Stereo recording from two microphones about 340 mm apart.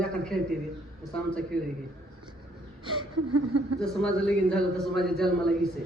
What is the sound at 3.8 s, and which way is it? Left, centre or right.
A man's voice, centre.